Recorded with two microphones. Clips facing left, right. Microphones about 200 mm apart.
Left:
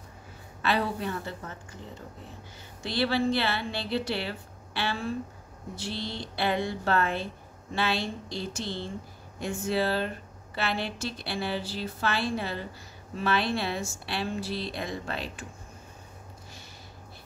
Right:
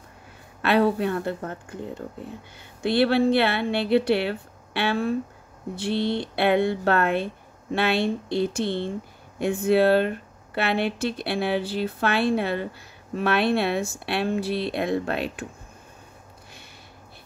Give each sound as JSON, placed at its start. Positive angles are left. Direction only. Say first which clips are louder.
{"t": 0.6, "sound": "a woman's voice", "louder": "right 8 dB", "side_deg": -60}